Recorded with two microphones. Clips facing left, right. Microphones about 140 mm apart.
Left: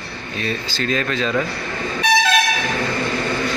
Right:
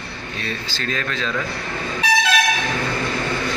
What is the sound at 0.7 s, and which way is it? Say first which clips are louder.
Speech: left 5 dB; 15° left (ahead or behind).